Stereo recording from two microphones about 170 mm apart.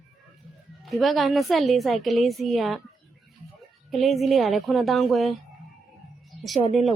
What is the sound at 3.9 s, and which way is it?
A woman's voice, centre (ahead or behind).